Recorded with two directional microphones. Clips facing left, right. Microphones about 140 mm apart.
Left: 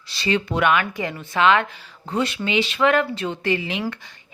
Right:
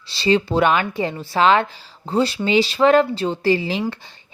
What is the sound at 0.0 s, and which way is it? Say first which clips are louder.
A woman's voice: right 5 dB; 30° right (ahead or behind).